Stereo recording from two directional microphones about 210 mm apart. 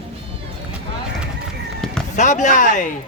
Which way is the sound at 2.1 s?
35° left (ahead or behind).